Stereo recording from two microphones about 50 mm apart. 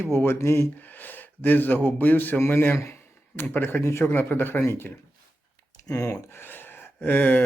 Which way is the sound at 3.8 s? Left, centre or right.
Left.